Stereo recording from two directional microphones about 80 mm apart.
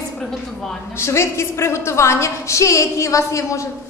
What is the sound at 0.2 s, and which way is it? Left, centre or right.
Speech, centre.